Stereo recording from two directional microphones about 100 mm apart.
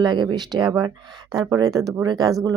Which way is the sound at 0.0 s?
45° right (ahead or behind).